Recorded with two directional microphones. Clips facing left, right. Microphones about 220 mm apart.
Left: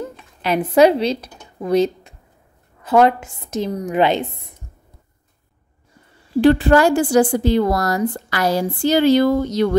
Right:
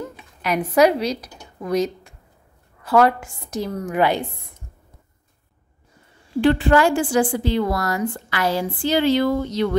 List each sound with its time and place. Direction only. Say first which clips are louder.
0.4 s a woman's voice: left 3 dB; 25° left (ahead or behind)
6.4 s a woman's voice: left 3 dB; 40° left (ahead or behind)